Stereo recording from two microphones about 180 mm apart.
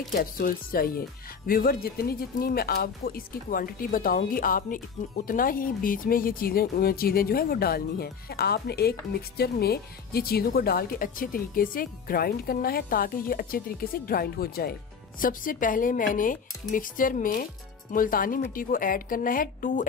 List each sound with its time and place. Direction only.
0.1 s speech: 55° left (ahead or behind)